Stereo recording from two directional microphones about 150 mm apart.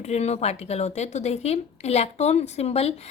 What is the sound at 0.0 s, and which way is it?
Speech, 45° left (ahead or behind).